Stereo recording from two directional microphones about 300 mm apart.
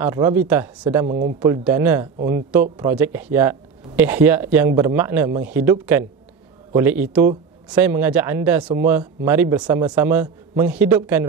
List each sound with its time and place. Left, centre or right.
0.0 s speech: centre